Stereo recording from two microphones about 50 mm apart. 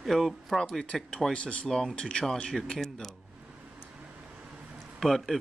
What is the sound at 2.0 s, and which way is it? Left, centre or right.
Speech, centre.